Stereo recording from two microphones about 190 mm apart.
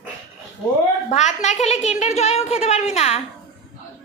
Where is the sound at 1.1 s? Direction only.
35° left (ahead or behind).